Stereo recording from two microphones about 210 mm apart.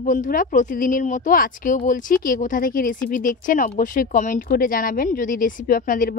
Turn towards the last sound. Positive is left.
turn(degrees=40)  # may be behind; listen again after turning